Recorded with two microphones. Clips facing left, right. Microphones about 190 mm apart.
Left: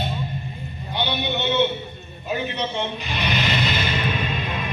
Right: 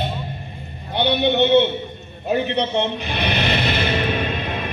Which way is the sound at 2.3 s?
60° right (ahead or behind).